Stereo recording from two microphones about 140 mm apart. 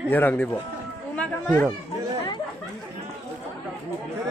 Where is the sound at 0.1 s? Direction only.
15° left (ahead or behind).